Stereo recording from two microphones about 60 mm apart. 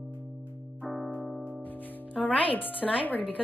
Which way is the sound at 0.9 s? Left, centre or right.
Centre.